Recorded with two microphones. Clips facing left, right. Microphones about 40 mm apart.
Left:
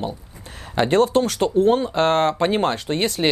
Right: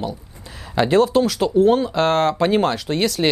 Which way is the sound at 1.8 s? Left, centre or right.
Left.